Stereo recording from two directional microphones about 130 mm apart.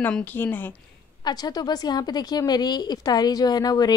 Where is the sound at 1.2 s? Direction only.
30° left (ahead or behind).